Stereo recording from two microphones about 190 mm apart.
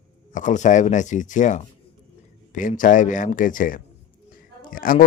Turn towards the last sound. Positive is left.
turn(degrees=50)  # may be behind; listen again after turning